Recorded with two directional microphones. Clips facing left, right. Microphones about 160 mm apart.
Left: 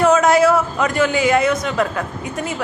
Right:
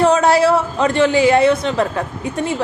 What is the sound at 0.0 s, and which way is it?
A man's voice, 30° right (ahead or behind).